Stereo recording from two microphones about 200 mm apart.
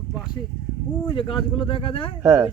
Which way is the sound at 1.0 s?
25° left (ahead or behind).